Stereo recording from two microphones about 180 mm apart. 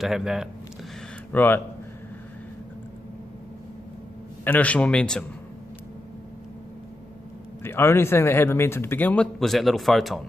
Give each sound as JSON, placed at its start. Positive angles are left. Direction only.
{"t": 0.0, "sound": "speech", "side_deg": 0}
{"t": 1.3, "sound": "a man's voice", "side_deg": 10}
{"t": 4.5, "sound": "a man's voice", "side_deg": 10}
{"t": 7.6, "sound": "a man's voice", "side_deg": 15}